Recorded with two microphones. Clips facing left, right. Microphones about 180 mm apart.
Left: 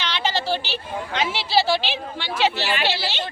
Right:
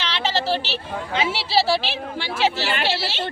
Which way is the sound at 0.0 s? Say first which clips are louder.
Right 1 dB; 5° right (ahead or behind).